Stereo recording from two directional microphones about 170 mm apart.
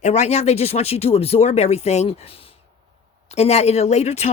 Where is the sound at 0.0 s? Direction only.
40° left (ahead or behind).